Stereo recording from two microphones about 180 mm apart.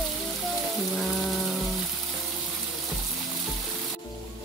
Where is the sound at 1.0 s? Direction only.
Centre (ahead or behind).